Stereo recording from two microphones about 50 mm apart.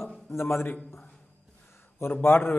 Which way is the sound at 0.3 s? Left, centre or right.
Left.